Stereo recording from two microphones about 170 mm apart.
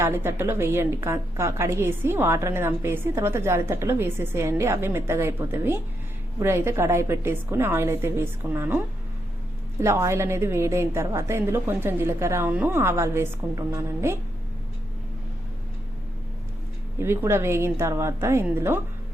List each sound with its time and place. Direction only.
0.0 s a woman's voice: 15° right (ahead or behind)
9.8 s a woman's voice: 15° right (ahead or behind)
17.0 s a woman's voice: 15° right (ahead or behind)